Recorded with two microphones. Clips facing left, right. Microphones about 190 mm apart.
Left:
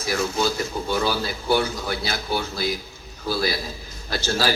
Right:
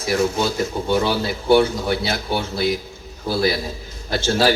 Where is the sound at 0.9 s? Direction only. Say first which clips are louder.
Right 4 dB; 25° right (ahead or behind).